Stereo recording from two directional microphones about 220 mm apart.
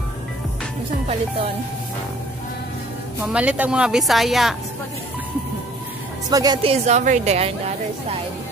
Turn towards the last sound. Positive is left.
turn(degrees=-30)  # may be behind; listen again after turning